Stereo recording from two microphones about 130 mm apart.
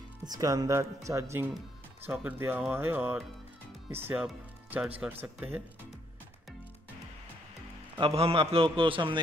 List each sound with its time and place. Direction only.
0.2 s speech: 30° right (ahead or behind)
8.0 s a man's voice: 50° right (ahead or behind)